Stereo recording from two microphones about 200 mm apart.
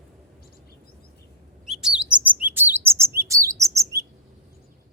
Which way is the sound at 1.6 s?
5° right (ahead or behind).